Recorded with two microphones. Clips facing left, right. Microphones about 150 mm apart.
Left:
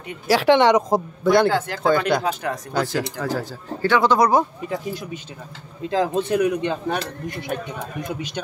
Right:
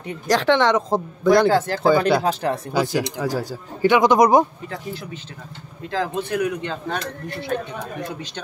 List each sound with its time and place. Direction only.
0.3 s speech: 10° left (ahead or behind)
1.2 s speech: centre (ahead or behind)
2.2 s speech: 30° right (ahead or behind)
2.7 s speech: 15° right (ahead or behind)
4.6 s speech: 15° left (ahead or behind)